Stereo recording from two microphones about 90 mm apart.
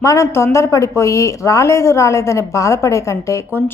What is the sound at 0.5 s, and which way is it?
A woman's voice, 35° left (ahead or behind).